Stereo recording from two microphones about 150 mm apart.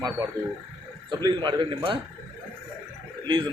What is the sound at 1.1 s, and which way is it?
Speech, 30° right (ahead or behind).